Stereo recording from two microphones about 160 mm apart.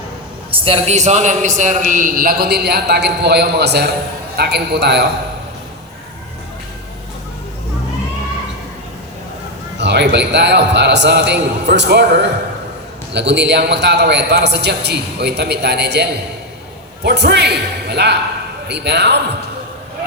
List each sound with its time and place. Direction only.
0.6 s a man's voice: 40° right (ahead or behind); by 5.0 s 90° right
9.7 s a man's voice: 90° right